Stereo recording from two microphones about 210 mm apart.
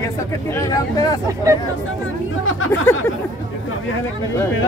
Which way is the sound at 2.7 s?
10° left (ahead or behind).